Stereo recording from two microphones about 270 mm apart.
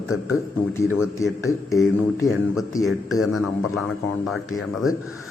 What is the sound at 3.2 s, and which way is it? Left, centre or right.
Speech, centre.